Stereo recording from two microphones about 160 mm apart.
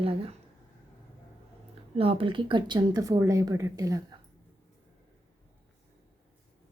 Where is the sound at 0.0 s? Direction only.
35° right (ahead or behind).